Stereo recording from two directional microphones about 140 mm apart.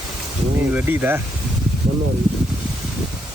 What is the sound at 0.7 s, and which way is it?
Speech, 10° right (ahead or behind).